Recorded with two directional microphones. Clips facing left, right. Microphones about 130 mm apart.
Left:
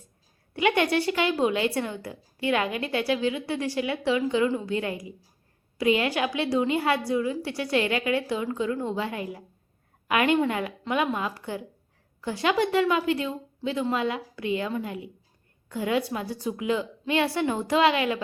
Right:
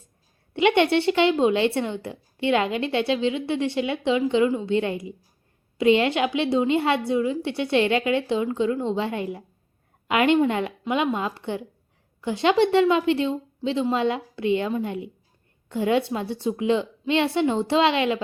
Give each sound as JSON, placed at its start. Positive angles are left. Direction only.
{"t": 0.5, "sound": "a woman's voice", "side_deg": -25}